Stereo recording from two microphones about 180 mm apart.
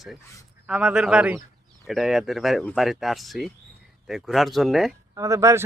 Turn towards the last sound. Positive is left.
turn(degrees=-15)  # may be behind; listen again after turning